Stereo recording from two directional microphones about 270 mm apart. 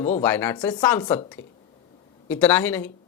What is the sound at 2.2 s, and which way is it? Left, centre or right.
Speech, centre.